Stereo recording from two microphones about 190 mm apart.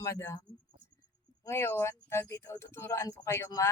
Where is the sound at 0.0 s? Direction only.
15° left (ahead or behind).